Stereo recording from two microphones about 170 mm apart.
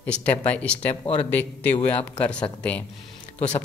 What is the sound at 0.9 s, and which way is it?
Speech, 40° left (ahead or behind).